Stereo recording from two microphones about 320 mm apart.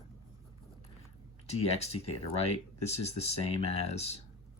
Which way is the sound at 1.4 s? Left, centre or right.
Centre.